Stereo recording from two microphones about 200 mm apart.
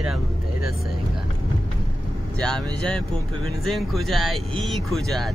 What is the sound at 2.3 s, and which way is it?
Speech, 5° left (ahead or behind).